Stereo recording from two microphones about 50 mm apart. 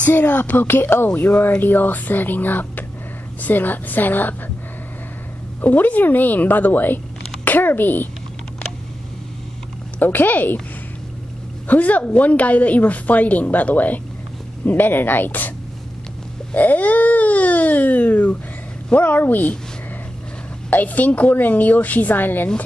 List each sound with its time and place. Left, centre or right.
0.1 s speech: left
5.6 s speech: left
9.9 s speech: left
11.6 s speech: left
16.5 s speech: left
20.7 s speech: left